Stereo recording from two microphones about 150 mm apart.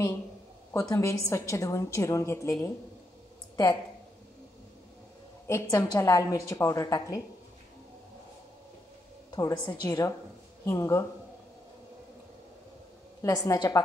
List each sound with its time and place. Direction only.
0.7 s a woman's voice: 20° left (ahead or behind)
5.5 s a woman's voice: 20° left (ahead or behind)
9.3 s a woman's voice: 25° left (ahead or behind)
13.2 s a woman's voice: 25° left (ahead or behind)